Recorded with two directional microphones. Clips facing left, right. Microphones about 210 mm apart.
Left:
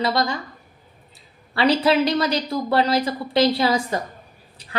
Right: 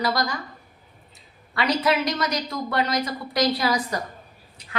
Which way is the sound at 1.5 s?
30° left (ahead or behind).